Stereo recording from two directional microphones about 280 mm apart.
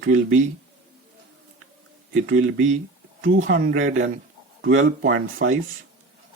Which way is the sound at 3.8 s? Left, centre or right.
Right.